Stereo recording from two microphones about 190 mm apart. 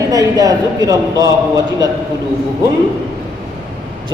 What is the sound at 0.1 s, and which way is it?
A man's voice, 20° right (ahead or behind).